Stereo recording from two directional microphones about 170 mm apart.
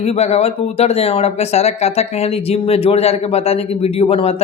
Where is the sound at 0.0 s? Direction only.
40° left (ahead or behind).